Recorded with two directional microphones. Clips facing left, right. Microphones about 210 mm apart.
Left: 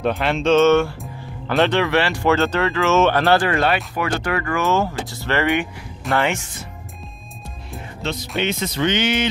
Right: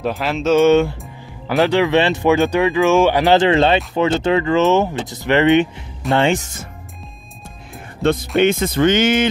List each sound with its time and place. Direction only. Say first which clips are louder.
0.0 s speech: even; centre (ahead or behind)
1.0 s music: even; centre (ahead or behind)
1.7 s speech: right 4 dB; 15° right (ahead or behind)
6.4 s speech: right 2 dB; 45° right (ahead or behind)
8.0 s speech: right 9 dB; 50° right (ahead or behind)